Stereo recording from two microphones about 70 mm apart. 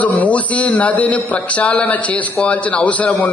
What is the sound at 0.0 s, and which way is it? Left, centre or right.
A man's voice, left.